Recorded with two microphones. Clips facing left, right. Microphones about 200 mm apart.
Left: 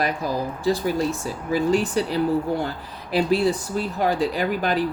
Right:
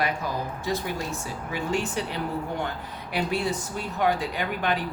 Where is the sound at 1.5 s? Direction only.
35° left (ahead or behind).